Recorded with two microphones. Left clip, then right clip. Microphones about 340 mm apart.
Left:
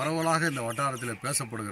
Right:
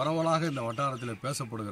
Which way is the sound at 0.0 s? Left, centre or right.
Centre.